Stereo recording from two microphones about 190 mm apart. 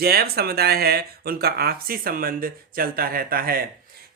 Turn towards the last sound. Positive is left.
turn(degrees=-50)  # may be behind; listen again after turning